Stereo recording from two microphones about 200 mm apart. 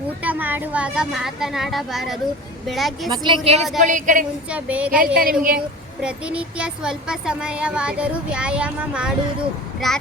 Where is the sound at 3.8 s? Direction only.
40° right (ahead or behind).